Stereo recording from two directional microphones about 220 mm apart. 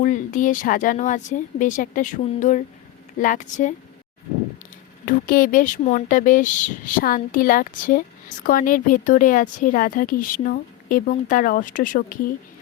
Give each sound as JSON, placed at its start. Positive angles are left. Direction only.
{"t": 0.0, "sound": "speech", "side_deg": 35}
{"t": 5.0, "sound": "speech", "side_deg": 40}